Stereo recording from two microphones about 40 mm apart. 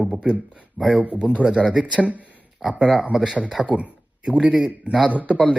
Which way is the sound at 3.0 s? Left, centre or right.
Centre.